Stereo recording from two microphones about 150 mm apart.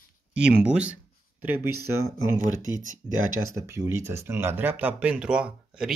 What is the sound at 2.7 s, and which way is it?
Speech, 60° right (ahead or behind).